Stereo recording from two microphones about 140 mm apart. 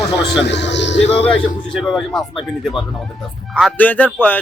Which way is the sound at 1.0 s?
45° left (ahead or behind).